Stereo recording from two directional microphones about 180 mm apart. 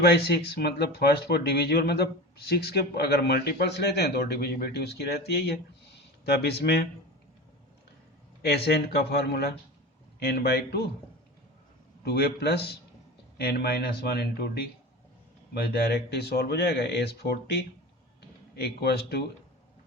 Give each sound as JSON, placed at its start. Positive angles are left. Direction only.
{"t": 0.0, "sound": "speech", "side_deg": 60}
{"t": 8.4, "sound": "speech", "side_deg": 65}
{"t": 12.0, "sound": "speech", "side_deg": 60}
{"t": 15.9, "sound": "speech", "side_deg": 60}